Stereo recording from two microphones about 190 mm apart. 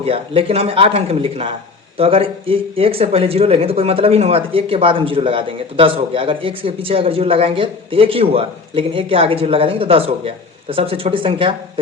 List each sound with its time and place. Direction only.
0.0 s speech: 30° right (ahead or behind)